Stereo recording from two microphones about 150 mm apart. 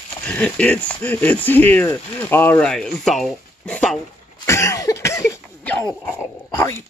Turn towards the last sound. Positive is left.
turn(degrees=20)  # may be behind; listen again after turning